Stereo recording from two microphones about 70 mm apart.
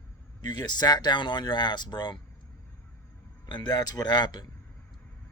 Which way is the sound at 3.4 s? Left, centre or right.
Left.